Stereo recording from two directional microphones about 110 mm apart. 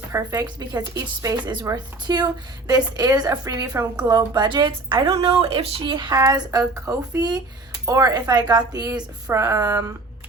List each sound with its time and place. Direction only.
0.1 s speech: 25° right (ahead or behind)
0.4 s a woman's voice: 40° right (ahead or behind)
6.1 s speech: 35° right (ahead or behind)